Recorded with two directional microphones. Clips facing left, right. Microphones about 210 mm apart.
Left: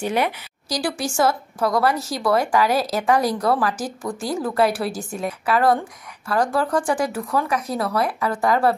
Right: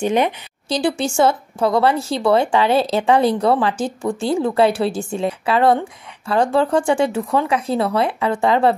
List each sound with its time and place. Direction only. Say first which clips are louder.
0.7 s speech: right 5 dB; 25° right (ahead or behind)